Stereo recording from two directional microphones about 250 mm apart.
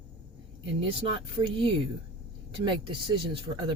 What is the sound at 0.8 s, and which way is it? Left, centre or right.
Speech, right.